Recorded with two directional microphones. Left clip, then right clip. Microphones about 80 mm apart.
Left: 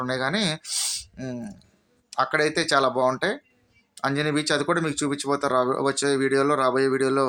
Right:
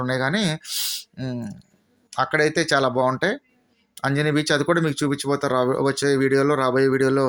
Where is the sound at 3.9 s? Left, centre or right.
Right.